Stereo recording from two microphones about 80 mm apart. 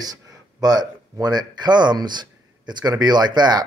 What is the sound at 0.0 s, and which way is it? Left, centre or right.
Speech, right.